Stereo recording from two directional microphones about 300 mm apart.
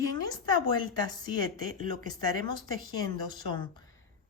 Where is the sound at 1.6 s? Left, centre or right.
Left.